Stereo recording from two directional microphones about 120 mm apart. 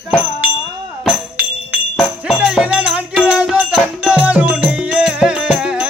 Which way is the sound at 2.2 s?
5° right (ahead or behind).